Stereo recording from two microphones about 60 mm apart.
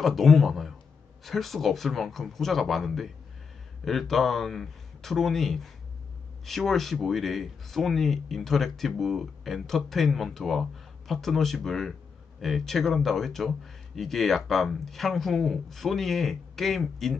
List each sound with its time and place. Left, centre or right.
0.0 s speech: centre